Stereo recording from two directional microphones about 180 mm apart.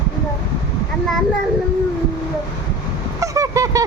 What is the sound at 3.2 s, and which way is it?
Vehicle, 15° right (ahead or behind).